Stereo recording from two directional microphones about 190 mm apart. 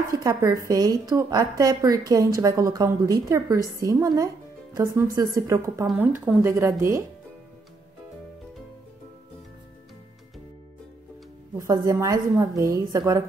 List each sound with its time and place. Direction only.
0.1 s a woman's voice: 20° right (ahead or behind)
11.5 s a woman's voice: 15° right (ahead or behind)